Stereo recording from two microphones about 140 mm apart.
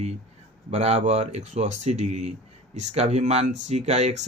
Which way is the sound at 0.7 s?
50° right (ahead or behind).